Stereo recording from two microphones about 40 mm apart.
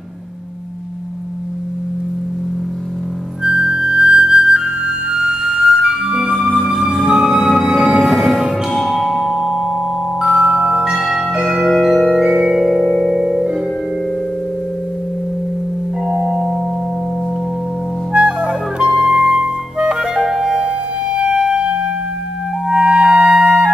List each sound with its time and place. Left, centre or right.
3.4 s flute: right
6.3 s music: centre
10.2 s marimba: centre
12.8 s music: centre
13.1 s music: centre
16.3 s singing bowl: centre
18.1 s music: right
18.9 s music: centre
19.4 s clarinet: right
20.2 s music: centre; by 21.8 s right
22.7 s clarinet: right